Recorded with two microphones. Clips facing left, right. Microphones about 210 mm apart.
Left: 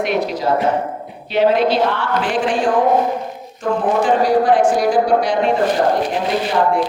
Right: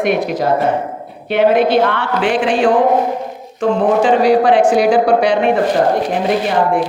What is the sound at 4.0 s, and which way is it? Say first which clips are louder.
A woman's voice: right 3 dB; 75° right (ahead or behind).